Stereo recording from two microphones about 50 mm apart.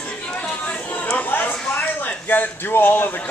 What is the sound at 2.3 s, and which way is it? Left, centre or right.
Speech, left.